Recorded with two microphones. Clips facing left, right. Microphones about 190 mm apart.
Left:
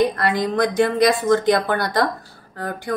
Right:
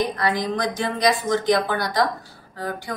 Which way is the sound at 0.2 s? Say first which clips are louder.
Left 3 dB; 60° left (ahead or behind).